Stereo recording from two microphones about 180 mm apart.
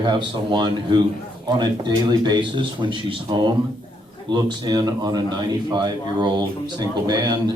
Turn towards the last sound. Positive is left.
turn(degrees=-25)  # may be behind; listen again after turning